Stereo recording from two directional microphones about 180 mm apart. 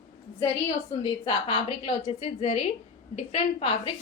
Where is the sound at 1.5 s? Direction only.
30° left (ahead or behind).